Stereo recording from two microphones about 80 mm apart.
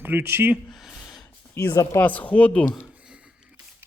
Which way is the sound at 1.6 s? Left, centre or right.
Left.